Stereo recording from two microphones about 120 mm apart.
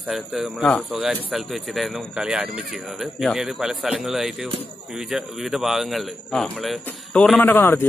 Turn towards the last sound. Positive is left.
turn(degrees=20)  # may be behind; listen again after turning